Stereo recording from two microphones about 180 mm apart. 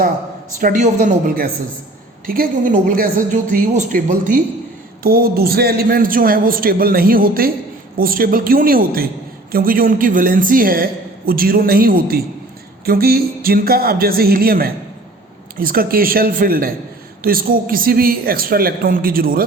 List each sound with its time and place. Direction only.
0.6 s a woman's voice: 45° right (ahead or behind)
5.0 s a man's voice: 55° right (ahead or behind)